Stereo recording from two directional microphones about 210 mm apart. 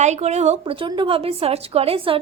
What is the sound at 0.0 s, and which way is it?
A woman's voice, 35° right (ahead or behind).